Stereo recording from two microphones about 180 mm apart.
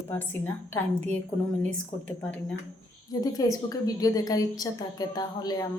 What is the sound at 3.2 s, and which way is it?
A woman's voice, 20° left (ahead or behind).